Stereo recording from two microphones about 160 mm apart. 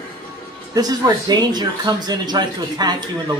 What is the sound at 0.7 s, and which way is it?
Speech, 25° right (ahead or behind).